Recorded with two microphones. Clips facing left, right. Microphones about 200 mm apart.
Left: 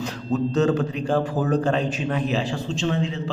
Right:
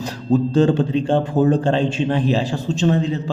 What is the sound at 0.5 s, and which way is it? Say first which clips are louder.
A man's voice: right 4 dB; 30° right (ahead or behind).